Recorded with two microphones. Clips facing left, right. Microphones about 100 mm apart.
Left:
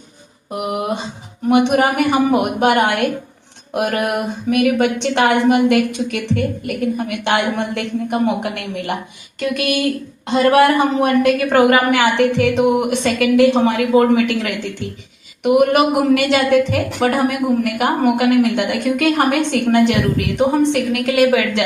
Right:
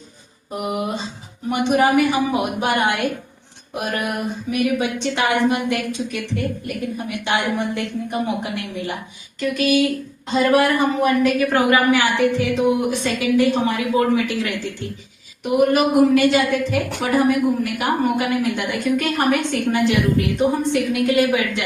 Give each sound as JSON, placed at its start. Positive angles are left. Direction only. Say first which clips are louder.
{"t": 0.7, "sound": "a woman's voice", "louder": "left 3 dB", "side_deg": 60}